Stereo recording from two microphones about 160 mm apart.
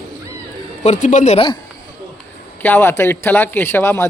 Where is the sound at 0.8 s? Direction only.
50° left (ahead or behind).